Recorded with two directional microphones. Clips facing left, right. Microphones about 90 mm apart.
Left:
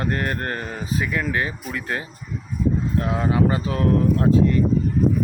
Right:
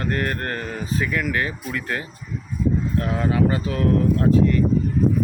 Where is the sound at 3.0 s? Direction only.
20° left (ahead or behind).